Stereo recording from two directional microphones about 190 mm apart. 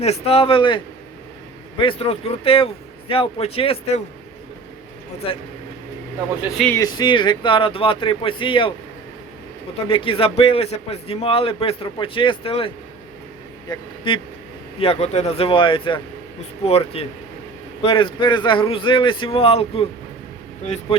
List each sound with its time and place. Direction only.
0.0 s speech: 35° left (ahead or behind)
1.8 s a man's voice: 30° left (ahead or behind)
5.2 s a man's voice: 30° left (ahead or behind)
6.7 s a man's voice: 20° left (ahead or behind)
9.7 s a man's voice: 30° left (ahead or behind)